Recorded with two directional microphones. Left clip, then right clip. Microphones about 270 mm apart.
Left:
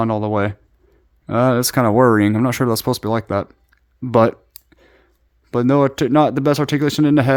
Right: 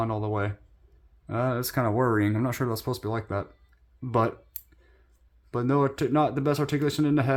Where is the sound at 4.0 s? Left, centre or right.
Left.